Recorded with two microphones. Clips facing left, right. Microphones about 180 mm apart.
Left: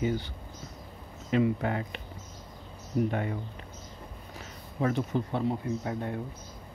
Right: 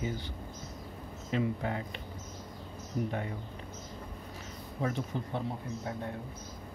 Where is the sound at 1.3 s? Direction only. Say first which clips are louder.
Left 6 dB; 80° left.